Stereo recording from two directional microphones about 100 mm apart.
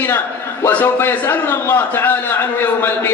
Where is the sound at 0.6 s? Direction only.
20° left (ahead or behind).